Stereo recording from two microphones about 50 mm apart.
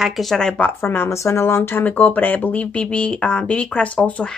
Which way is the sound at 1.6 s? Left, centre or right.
Left.